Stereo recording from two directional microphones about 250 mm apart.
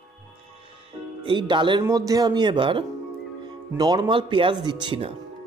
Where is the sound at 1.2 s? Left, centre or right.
Centre.